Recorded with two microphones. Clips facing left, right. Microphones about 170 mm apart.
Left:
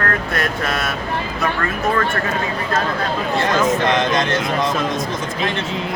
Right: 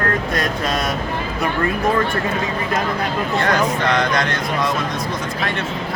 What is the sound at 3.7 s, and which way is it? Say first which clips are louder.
Speech: left 2 dB; 20° left (ahead or behind).